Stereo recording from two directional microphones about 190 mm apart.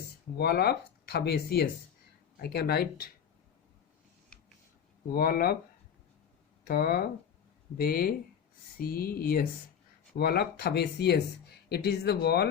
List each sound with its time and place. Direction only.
0.3 s speech: 55° left (ahead or behind)
5.1 s speech: 50° left (ahead or behind)
6.7 s speech: 55° left (ahead or behind)